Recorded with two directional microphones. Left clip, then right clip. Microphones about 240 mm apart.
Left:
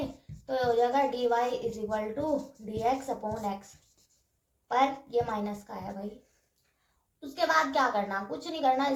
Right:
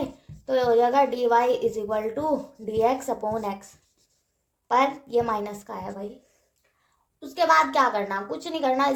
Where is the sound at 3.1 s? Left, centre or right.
Right.